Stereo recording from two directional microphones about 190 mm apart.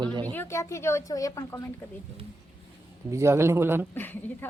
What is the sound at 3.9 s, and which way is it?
Speech, 10° left (ahead or behind).